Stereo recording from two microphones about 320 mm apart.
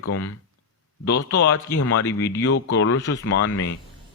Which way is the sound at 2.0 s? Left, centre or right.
Centre.